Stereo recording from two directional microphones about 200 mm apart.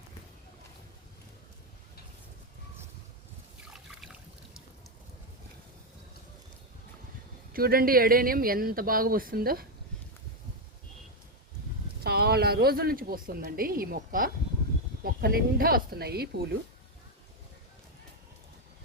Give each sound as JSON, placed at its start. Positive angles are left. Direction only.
{"t": 3.7, "sound": "trickle", "side_deg": -5}
{"t": 7.5, "sound": "speech", "side_deg": -45}
{"t": 12.0, "sound": "a woman's voice", "side_deg": -55}